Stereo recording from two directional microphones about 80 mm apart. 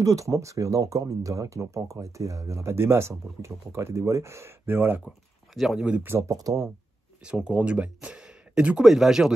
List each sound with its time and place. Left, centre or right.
0.0 s speech: right
5.5 s speech: centre
6.0 s speech: right
6.3 s speech: right
7.2 s speech: centre